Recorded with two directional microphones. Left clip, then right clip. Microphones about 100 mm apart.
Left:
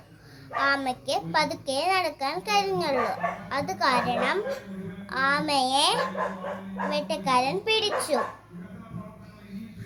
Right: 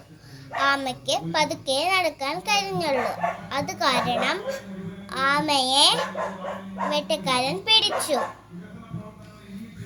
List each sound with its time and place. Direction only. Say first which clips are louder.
0.5 s a child's voice: right 2 dB; 35° left (ahead or behind)